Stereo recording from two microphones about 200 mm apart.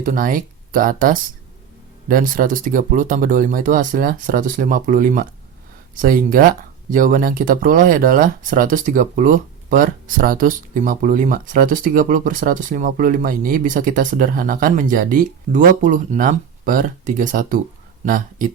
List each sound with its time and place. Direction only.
0.0 s speech: 45° right (ahead or behind)